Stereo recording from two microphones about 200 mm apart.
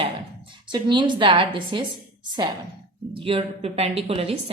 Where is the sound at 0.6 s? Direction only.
20° right (ahead or behind).